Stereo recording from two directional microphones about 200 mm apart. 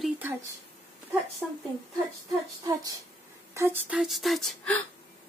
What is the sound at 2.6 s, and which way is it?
Speech, 15° right (ahead or behind).